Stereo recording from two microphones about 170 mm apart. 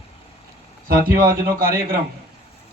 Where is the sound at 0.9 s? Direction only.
60° right (ahead or behind).